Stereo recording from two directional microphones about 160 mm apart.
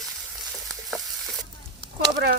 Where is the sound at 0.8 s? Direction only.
Centre (ahead or behind).